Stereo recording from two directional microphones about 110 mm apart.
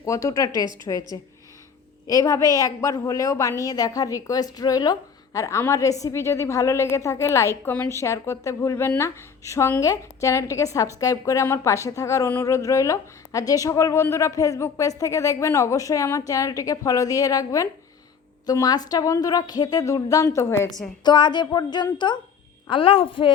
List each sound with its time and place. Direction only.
0.0 s a woman's voice: 30° left (ahead or behind)
2.0 s a woman's voice: 30° left (ahead or behind)
21.0 s a woman's voice: 45° left (ahead or behind)
22.7 s a woman's voice: 55° left (ahead or behind)